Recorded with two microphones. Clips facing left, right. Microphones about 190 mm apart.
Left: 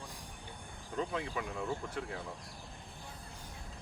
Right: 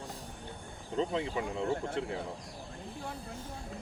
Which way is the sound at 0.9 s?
25° right (ahead or behind).